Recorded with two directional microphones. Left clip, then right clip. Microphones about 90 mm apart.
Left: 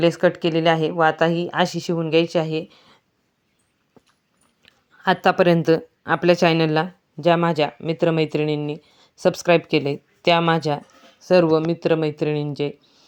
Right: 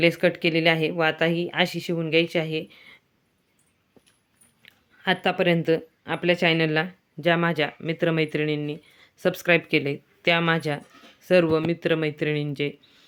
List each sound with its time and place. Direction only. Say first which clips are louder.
0.2 s a woman's voice: left 3 dB; 15° left (ahead or behind)
1.2 s speech: left 4 dB; 25° left (ahead or behind)
5.0 s speech: left 5 dB; 35° left (ahead or behind)
5.3 s speech: left 6 dB; 55° left (ahead or behind)
6.7 s speech: left 3 dB; 35° left (ahead or behind); by 13.1 s 10° left (ahead or behind)